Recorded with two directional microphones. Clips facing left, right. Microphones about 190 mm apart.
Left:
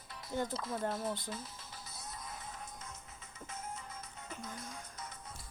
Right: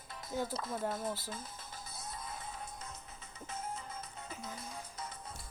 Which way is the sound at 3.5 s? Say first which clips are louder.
Right 3 dB; 30° right (ahead or behind).